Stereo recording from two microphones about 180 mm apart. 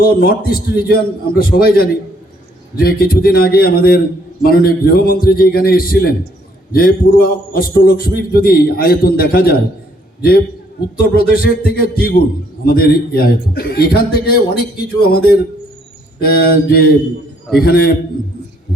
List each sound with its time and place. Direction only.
0.0 s a man's voice: 55° left (ahead or behind)
11.1 s a man's voice: 55° left (ahead or behind)